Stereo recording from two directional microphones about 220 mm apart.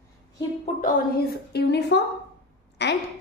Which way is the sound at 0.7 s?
40° left (ahead or behind).